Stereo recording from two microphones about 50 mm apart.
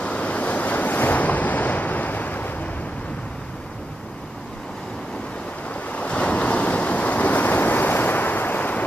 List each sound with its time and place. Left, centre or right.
0.0 s waves: left
5.9 s waves: left